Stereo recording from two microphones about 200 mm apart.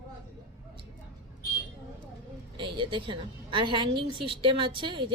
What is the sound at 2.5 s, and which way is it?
A woman's voice, 25° right (ahead or behind).